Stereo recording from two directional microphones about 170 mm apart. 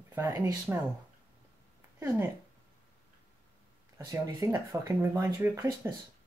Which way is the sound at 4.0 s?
15° right (ahead or behind).